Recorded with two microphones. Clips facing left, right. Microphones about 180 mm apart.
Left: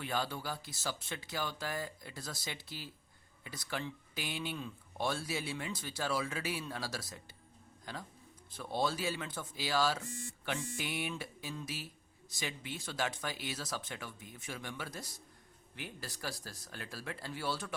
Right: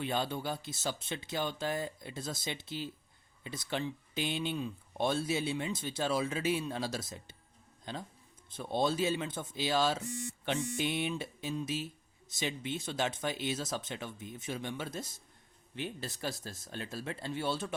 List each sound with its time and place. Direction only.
0.0 s speech: 20° right (ahead or behind)